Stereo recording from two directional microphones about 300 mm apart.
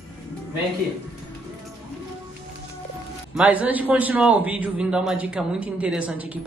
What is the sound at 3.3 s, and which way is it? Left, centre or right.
A man's voice, centre.